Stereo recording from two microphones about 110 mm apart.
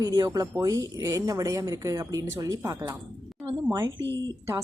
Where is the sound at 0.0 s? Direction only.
30° right (ahead or behind).